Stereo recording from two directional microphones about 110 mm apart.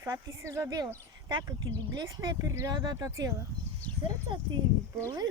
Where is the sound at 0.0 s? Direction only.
25° right (ahead or behind).